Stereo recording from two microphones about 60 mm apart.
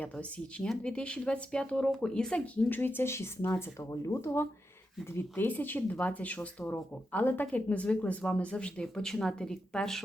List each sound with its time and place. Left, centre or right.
0.0 s speech: centre
2.6 s speech: left
3.5 s speech: left
5.1 s speech: left; by 10.0 s centre